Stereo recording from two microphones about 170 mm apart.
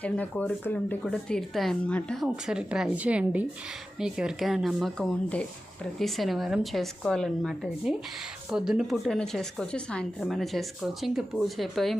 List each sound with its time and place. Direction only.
0.0 s a woman's voice: 10° left (ahead or behind)
2.2 s a woman's voice: 5° right (ahead or behind)